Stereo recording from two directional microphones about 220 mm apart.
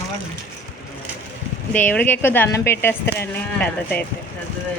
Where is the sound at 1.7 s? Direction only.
5° left (ahead or behind).